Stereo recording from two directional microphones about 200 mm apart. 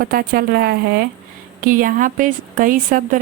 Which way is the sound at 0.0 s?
45° right (ahead or behind).